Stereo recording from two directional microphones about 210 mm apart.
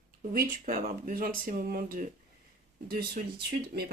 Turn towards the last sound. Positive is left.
turn(degrees=-50)  # may be behind; listen again after turning